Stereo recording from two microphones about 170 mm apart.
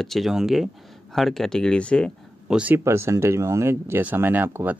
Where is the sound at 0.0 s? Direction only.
Centre (ahead or behind).